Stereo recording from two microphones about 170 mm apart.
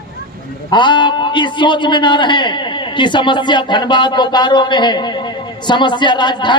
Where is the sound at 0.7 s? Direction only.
25° left (ahead or behind).